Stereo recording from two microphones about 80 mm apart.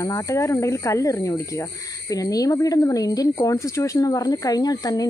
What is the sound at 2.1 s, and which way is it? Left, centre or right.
Speech, left.